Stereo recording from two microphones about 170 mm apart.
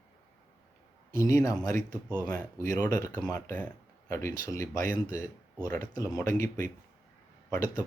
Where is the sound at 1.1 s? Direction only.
20° left (ahead or behind).